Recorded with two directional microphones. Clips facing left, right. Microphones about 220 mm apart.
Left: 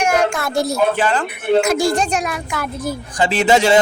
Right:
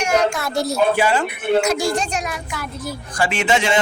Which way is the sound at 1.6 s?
55° left (ahead or behind).